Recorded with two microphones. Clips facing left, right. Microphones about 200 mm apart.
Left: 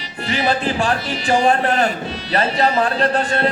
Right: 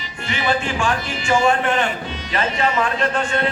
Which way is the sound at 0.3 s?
35° left (ahead or behind).